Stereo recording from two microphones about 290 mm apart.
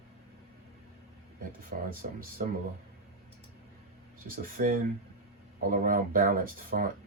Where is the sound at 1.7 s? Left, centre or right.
Right.